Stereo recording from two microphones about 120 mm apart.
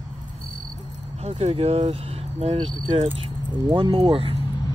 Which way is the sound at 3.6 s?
50° right (ahead or behind).